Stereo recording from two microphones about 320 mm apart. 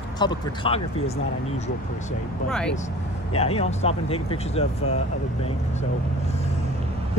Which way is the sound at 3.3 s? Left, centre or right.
Centre.